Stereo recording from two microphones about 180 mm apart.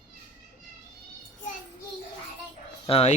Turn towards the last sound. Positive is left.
turn(degrees=35)  # may be behind; listen again after turning